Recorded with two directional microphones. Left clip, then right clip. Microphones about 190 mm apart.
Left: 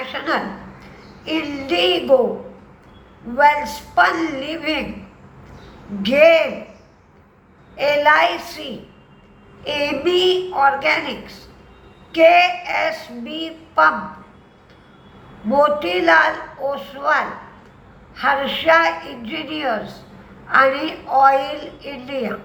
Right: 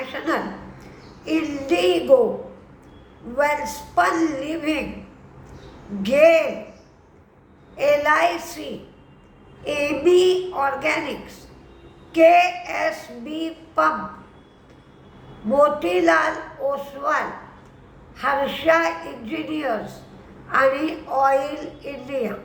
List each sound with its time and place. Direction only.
0.0 s a sound: 15° right (ahead or behind)
3.3 s a woman's voice: 15° right (ahead or behind)
6.0 s a woman's voice: 15° right (ahead or behind)
7.8 s a woman's voice: 15° right (ahead or behind)
15.4 s a woman's voice: 15° right (ahead or behind)